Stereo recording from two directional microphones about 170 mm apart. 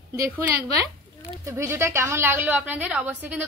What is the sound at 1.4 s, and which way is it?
A woman's voice, 15° right (ahead or behind).